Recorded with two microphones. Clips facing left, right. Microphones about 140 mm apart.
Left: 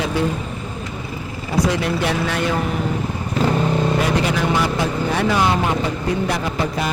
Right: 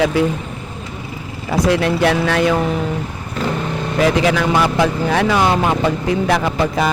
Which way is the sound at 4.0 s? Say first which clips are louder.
Right 4 dB; 90° right.